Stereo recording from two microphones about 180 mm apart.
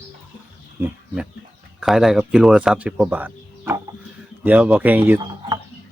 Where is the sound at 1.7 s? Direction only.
Centre (ahead or behind).